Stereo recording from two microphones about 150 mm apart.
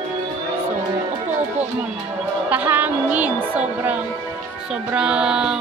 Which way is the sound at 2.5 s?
10° right (ahead or behind).